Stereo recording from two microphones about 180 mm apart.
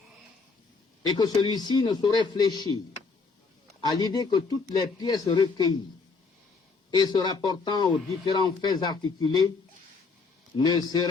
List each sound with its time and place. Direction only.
1.0 s speech: 25° left (ahead or behind)
3.9 s speech: 25° left (ahead or behind)
6.9 s speech: 25° left (ahead or behind)
10.6 s speech: 25° left (ahead or behind)